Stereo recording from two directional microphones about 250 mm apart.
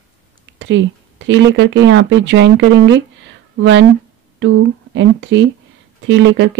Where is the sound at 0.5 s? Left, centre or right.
Right.